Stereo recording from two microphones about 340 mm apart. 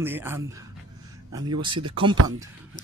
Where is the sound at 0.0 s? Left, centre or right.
Centre.